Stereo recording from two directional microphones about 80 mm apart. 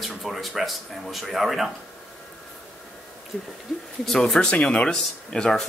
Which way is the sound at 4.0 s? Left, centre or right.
Centre.